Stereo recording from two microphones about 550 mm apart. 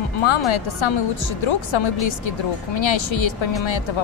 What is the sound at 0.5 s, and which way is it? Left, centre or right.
Speech, left.